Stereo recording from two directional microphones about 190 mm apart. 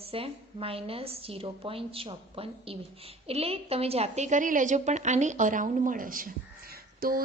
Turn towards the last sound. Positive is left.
turn(degrees=-50)  # may be behind; listen again after turning